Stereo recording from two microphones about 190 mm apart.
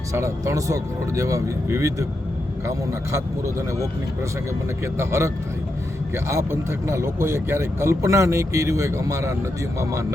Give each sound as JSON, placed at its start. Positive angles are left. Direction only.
{"t": 0.1, "sound": "speech", "side_deg": -15}
{"t": 4.9, "sound": "speech", "side_deg": -15}